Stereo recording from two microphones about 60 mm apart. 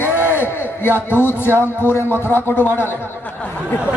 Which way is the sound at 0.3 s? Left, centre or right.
Left.